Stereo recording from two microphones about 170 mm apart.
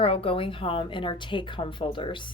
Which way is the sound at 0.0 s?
35° left (ahead or behind).